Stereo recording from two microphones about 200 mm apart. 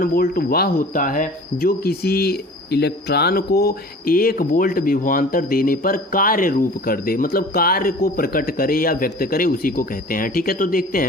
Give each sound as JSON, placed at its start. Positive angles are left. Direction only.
{"t": 0.0, "sound": "speech", "side_deg": 50}